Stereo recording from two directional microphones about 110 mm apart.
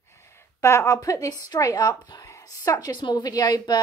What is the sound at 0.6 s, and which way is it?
Speech, 25° left (ahead or behind).